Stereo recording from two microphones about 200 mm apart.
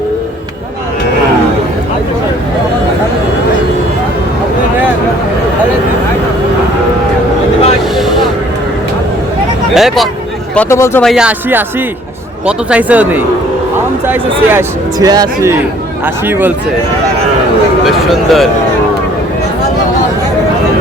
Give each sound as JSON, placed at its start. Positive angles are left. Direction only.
{"t": 9.7, "sound": "hubbub", "side_deg": 0}
{"t": 10.5, "sound": "speech", "side_deg": 10}
{"t": 11.0, "sound": "speech", "side_deg": -5}
{"t": 17.8, "sound": "speech", "side_deg": 0}